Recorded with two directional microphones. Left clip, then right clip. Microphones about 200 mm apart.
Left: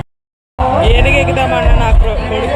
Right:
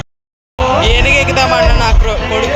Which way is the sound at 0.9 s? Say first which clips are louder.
Right 1 dB; centre (ahead or behind).